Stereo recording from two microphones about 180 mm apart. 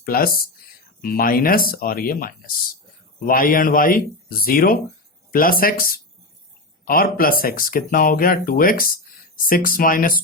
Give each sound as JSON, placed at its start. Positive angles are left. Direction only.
{"t": 0.0, "sound": "speech", "side_deg": 55}